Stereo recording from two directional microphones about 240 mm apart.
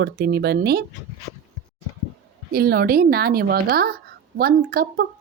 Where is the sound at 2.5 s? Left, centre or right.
Right.